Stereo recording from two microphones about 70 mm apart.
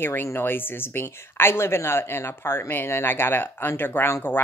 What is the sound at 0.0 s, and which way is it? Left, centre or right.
Speech, left.